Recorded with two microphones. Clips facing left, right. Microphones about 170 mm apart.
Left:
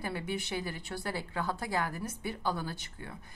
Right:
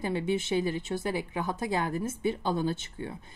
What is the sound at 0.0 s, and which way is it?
A woman's voice, 20° right (ahead or behind).